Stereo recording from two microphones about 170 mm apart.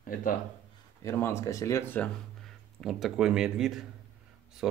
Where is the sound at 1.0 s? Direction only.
15° left (ahead or behind).